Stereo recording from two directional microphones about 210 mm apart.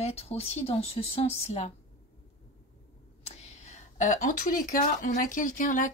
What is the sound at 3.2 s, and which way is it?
Speech, 30° left (ahead or behind).